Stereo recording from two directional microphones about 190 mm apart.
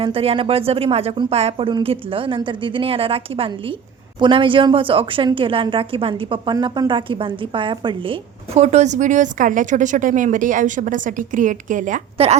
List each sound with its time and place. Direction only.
0.0 s a woman's voice: 30° right (ahead or behind)